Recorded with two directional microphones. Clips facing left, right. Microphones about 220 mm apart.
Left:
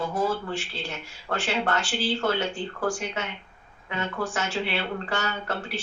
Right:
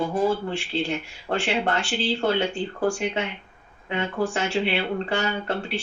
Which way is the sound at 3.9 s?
30° right (ahead or behind).